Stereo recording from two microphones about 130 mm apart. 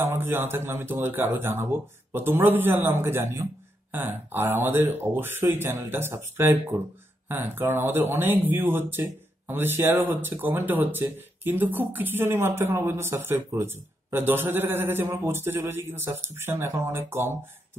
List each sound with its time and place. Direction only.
0.0 s speech: 15° right (ahead or behind)